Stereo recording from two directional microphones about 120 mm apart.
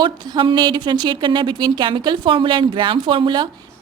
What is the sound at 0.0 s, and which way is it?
Speech, 40° right (ahead or behind).